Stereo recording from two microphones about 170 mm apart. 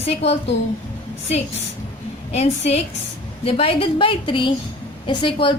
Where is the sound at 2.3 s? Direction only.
40° left (ahead or behind).